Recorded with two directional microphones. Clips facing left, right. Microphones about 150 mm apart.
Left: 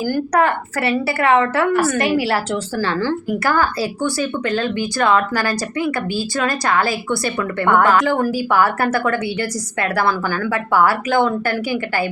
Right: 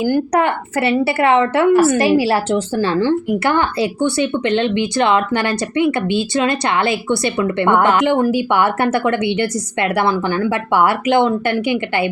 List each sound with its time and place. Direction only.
0.0 s a woman's voice: 20° right (ahead or behind)